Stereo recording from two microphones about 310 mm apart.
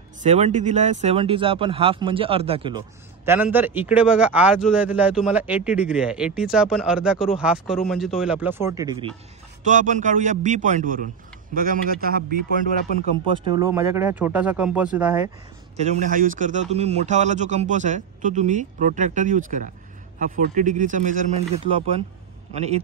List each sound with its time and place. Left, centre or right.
0.2 s speech: right
3.5 s a man's voice: centre; by 12.4 s right
12.8 s speech: left
13.5 s speech: centre
15.7 s a man's voice: right